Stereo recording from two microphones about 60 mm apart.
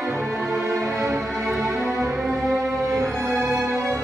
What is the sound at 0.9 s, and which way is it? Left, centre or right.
Music, right.